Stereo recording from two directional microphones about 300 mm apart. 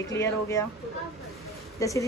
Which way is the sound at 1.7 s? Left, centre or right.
Centre.